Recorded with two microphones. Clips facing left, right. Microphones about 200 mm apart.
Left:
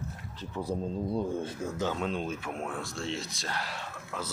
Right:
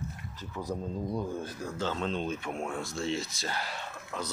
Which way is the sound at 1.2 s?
25° left (ahead or behind).